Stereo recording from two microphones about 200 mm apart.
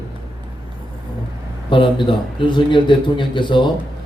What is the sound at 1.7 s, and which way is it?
A man's voice, 25° left (ahead or behind).